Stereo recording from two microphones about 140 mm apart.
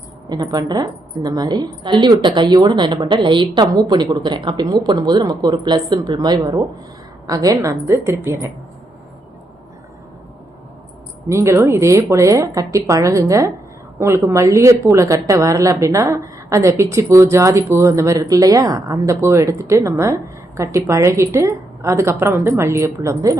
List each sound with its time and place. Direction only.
0.3 s a woman's voice: 25° right (ahead or behind)
11.3 s a woman's voice: 20° right (ahead or behind)